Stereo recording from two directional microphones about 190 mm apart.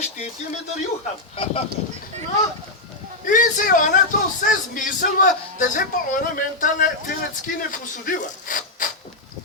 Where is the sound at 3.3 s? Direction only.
45° left (ahead or behind).